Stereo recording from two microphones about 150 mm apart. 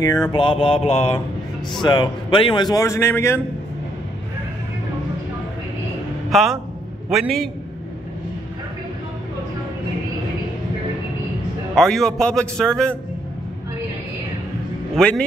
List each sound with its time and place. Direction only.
0.3 s mantra: 35° left (ahead or behind)
1.8 s a man's voice: 30° left (ahead or behind)
6.3 s a man's voice: centre (ahead or behind)
11.7 s a man's voice: 5° left (ahead or behind)
15.0 s a man's voice: 5° left (ahead or behind)